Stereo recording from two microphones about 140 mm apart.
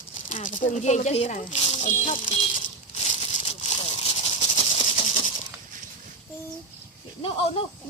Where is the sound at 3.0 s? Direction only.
50° left (ahead or behind).